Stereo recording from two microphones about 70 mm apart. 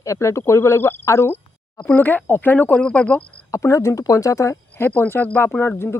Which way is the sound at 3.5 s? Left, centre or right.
Left.